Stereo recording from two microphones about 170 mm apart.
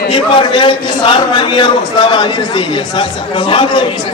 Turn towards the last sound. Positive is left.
turn(degrees=30)  # may be behind; listen again after turning